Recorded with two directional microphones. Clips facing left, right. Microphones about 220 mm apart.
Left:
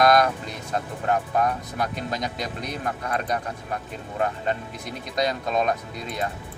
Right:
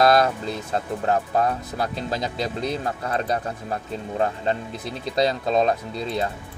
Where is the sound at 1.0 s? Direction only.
30° right (ahead or behind).